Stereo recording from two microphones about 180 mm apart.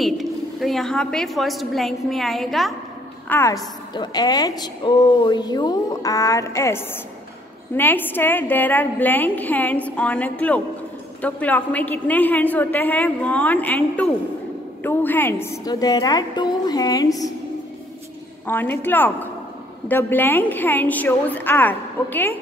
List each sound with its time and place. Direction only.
0.0 s a woman's voice: centre (ahead or behind)
3.3 s a woman's voice: 15° left (ahead or behind)
18.5 s a woman's voice: 10° left (ahead or behind)